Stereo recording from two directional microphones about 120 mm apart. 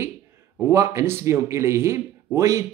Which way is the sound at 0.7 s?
25° right (ahead or behind).